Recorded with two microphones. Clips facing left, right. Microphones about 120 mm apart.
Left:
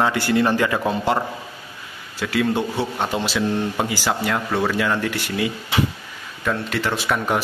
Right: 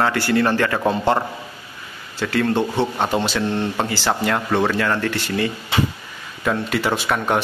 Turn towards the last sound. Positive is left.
turn(degrees=0)  # may be behind; listen again after turning